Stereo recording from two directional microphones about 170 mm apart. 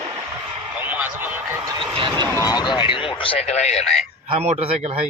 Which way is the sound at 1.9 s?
30° right (ahead or behind).